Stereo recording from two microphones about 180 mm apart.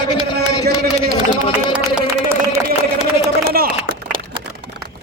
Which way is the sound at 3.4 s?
55° right (ahead or behind).